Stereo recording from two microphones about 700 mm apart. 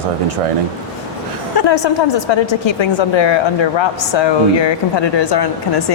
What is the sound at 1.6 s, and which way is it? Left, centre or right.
A woman's voice, left.